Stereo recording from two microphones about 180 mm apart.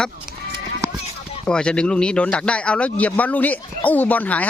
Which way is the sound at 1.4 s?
5° left (ahead or behind).